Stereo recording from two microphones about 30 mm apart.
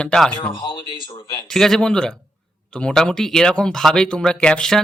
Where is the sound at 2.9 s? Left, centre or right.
Centre.